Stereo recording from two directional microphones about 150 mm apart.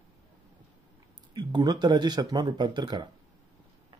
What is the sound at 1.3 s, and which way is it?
Speech, 30° right (ahead or behind).